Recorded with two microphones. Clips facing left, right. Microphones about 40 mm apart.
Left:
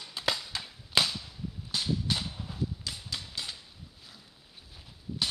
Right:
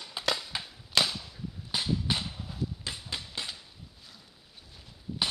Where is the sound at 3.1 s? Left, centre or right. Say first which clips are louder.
Right 1 dB; right.